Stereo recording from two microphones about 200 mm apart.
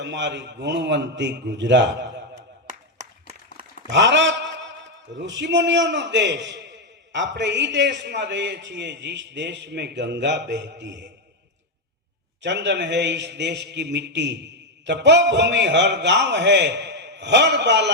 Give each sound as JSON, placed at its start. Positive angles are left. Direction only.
{"t": 0.0, "sound": "a man's voice", "side_deg": -65}
{"t": 3.8, "sound": "a man's voice", "side_deg": -60}
{"t": 12.4, "sound": "a man's voice", "side_deg": -60}